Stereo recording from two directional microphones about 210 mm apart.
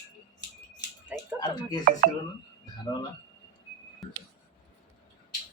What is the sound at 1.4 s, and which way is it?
Speech, 20° left (ahead or behind).